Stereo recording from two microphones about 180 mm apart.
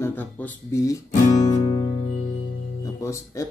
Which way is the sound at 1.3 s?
20° left (ahead or behind).